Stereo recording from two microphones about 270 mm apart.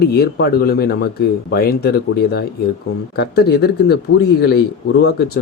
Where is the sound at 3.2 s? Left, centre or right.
Left.